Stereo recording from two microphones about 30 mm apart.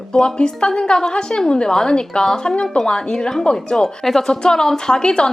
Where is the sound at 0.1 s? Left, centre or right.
Left.